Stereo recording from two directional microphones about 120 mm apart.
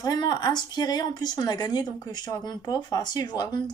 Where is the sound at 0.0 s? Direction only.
35° left (ahead or behind).